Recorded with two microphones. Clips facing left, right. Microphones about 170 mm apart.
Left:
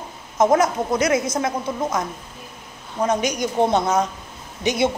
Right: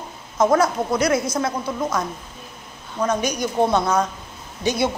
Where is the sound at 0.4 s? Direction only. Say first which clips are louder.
Even; 20° left (ahead or behind).